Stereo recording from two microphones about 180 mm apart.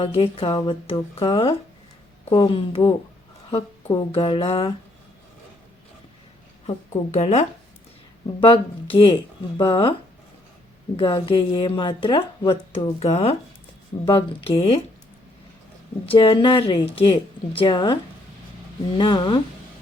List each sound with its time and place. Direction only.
0.0 s a woman's voice: 30° left (ahead or behind)
6.7 s a woman's voice: 40° left (ahead or behind)
10.9 s a woman's voice: 30° left (ahead or behind)
13.9 s a woman's voice: 25° left (ahead or behind)
16.1 s a woman's voice: 30° left (ahead or behind)
18.9 s a woman's voice: 25° left (ahead or behind)